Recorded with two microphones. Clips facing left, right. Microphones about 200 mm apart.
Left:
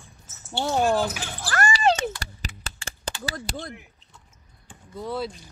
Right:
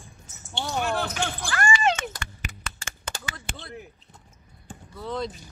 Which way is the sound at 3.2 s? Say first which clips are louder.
Left 7 dB; 40° left (ahead or behind).